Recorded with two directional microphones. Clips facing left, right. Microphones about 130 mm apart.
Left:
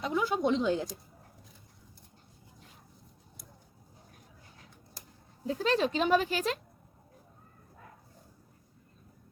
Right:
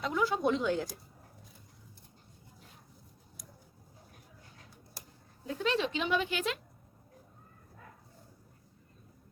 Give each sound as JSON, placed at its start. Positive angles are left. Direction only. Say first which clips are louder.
{"t": 0.0, "sound": "speech", "louder": "left 1 dB", "side_deg": 20}
{"t": 5.5, "sound": "speech", "louder": "left 3 dB", "side_deg": 35}